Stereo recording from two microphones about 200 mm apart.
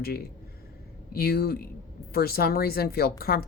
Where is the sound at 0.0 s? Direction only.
50° left (ahead or behind).